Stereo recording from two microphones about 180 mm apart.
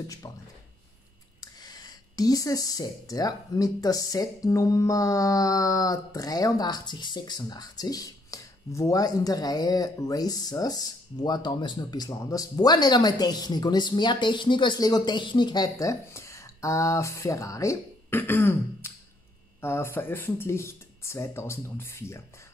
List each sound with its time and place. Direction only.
0.2 s speech: 20° left (ahead or behind)